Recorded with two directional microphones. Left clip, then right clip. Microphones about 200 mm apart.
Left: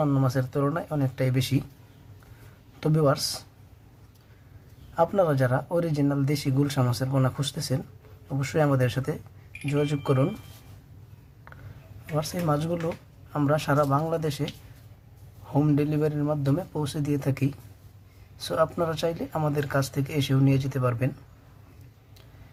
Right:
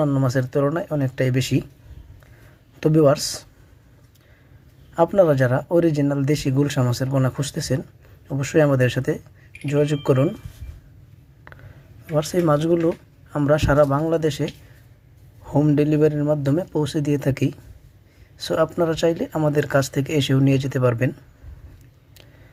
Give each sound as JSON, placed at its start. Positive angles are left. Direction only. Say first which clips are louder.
{"t": 0.0, "sound": "speech", "louder": "right 5 dB", "side_deg": -10}
{"t": 2.8, "sound": "speech", "louder": "right 8 dB", "side_deg": -20}
{"t": 4.9, "sound": "speech", "louder": "right 6 dB", "side_deg": -20}
{"t": 12.1, "sound": "speech", "louder": "right 8 dB", "side_deg": -25}